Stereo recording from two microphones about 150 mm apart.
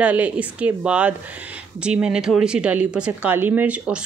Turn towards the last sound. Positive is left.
turn(degrees=-10)  # may be behind; listen again after turning